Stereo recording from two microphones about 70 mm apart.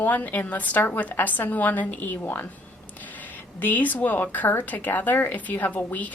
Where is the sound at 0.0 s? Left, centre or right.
Left.